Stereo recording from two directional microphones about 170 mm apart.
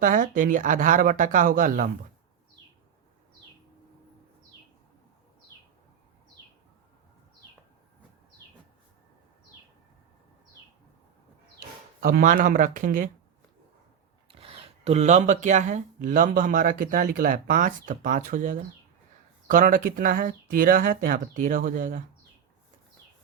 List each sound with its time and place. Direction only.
0.0 s speech: 50° right (ahead or behind)
11.9 s speech: 55° right (ahead or behind)
14.3 s speech: 35° right (ahead or behind); by 22.0 s 50° right (ahead or behind)